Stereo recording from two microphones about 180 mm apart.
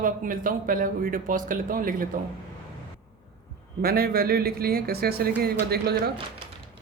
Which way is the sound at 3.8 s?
60° right (ahead or behind).